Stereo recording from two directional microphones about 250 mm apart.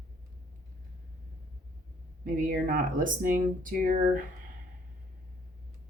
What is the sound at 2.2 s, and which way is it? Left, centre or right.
Speech, right.